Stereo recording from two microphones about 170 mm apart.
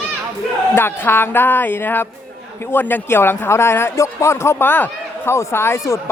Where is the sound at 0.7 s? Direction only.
15° left (ahead or behind).